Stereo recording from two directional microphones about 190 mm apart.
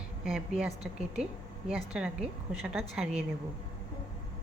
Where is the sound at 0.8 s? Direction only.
35° right (ahead or behind).